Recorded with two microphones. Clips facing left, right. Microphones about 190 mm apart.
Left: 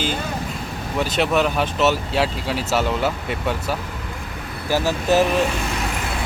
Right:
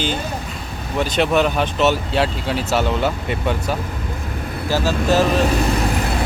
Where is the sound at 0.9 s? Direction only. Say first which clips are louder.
Right 2 dB; 5° left (ahead or behind).